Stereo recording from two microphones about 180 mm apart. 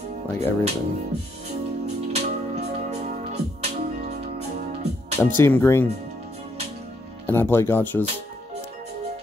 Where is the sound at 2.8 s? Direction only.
40° right (ahead or behind).